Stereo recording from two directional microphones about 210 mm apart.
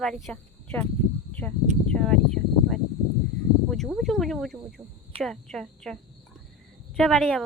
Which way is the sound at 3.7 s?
Centre (ahead or behind).